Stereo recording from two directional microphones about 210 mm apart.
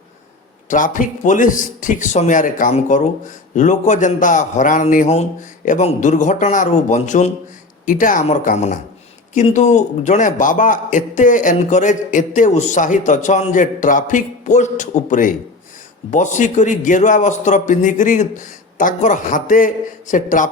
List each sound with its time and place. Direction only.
0.7 s a man's voice: 40° left (ahead or behind)